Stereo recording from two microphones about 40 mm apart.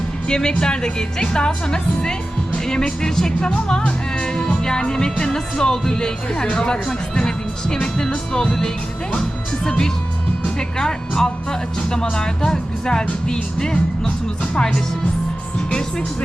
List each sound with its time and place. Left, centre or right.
0.3 s music: centre
10.4 s speech: left
12.1 s music: centre